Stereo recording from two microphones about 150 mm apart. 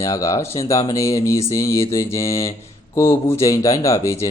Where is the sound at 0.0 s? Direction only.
20° left (ahead or behind).